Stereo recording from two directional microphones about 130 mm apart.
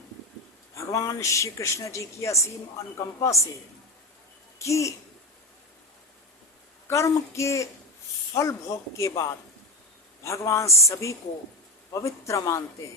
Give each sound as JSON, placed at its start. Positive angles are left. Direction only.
{"t": 0.8, "sound": "speech", "side_deg": 25}
{"t": 4.6, "sound": "speech", "side_deg": 25}
{"t": 6.8, "sound": "speech", "side_deg": 20}